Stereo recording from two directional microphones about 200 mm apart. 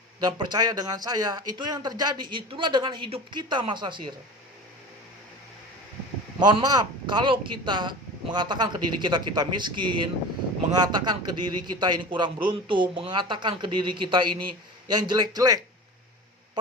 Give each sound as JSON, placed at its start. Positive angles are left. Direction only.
{"t": 0.2, "sound": "a man's voice", "side_deg": -20}
{"t": 6.4, "sound": "a man's voice", "side_deg": -20}